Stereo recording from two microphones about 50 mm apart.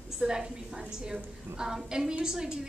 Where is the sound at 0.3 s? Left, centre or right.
Centre.